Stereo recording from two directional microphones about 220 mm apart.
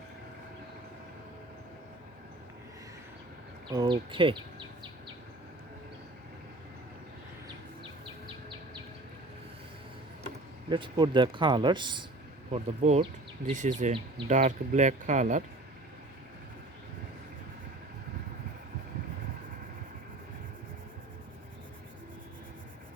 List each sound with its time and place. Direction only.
3.7 s speech: 20° right (ahead or behind)
10.7 s speech: 20° right (ahead or behind)